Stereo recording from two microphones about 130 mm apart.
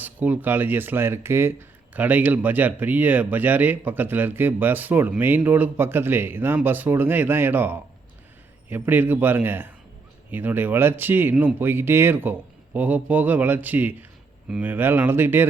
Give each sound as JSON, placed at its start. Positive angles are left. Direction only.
{"t": 0.0, "sound": "speech", "side_deg": -15}